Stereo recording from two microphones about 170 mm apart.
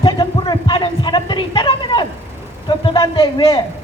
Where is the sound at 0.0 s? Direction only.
25° left (ahead or behind).